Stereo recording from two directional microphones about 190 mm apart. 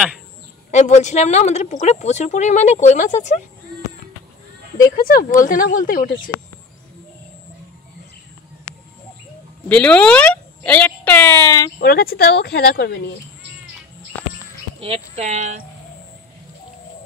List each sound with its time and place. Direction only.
0.7 s a woman's voice: 40° left (ahead or behind)
5.0 s speech: 45° left (ahead or behind)
9.7 s speech: 5° left (ahead or behind)
11.8 s speech: 55° left (ahead or behind)
14.8 s speech: 35° right (ahead or behind)